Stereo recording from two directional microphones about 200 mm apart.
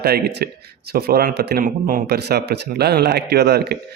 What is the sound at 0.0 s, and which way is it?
A man's voice, 55° right (ahead or behind).